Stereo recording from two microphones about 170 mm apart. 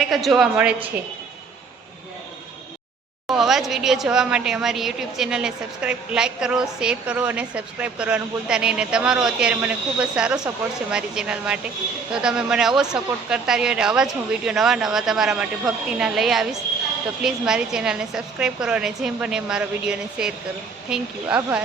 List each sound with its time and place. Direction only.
0.0 s a woman's voice: centre (ahead or behind)
3.2 s a woman's voice: centre (ahead or behind)